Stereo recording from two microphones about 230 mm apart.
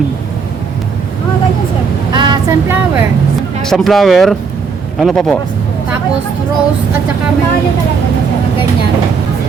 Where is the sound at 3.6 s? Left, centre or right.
Centre.